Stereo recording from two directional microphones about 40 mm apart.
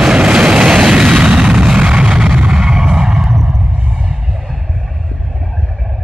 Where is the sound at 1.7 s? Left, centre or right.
Right.